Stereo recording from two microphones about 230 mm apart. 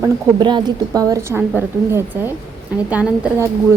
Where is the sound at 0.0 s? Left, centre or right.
Centre.